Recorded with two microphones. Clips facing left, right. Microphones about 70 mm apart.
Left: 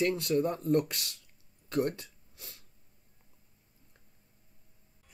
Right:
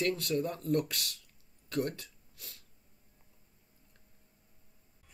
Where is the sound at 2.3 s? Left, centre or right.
Left.